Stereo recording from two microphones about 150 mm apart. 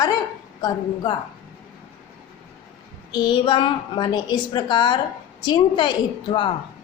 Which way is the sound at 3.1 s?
30° left (ahead or behind).